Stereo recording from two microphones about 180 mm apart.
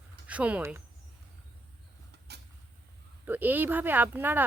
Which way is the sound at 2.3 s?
65° right (ahead or behind).